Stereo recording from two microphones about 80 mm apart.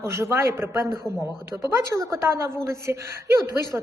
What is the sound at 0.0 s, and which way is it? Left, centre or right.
A woman's voice, right.